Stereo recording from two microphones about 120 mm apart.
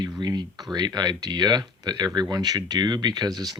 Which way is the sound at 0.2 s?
35° right (ahead or behind).